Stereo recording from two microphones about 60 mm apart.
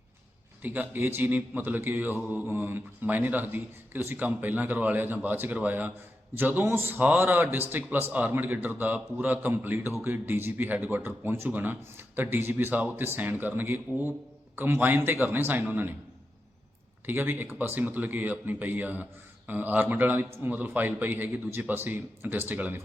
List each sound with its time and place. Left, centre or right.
0.6 s a man's voice: right
17.1 s a man's voice: right